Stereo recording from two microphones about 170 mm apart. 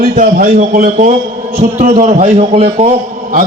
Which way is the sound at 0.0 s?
55° right (ahead or behind).